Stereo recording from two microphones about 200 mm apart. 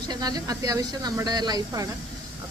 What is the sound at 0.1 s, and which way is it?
Speech, 20° right (ahead or behind).